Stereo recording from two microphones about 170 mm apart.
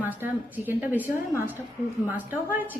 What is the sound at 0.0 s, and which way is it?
A woman's voice, 10° right (ahead or behind).